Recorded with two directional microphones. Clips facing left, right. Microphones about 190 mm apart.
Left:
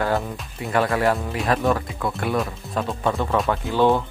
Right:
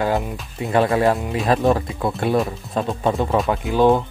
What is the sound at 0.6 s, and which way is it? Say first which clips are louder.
Speech: right 4 dB; 20° right (ahead or behind).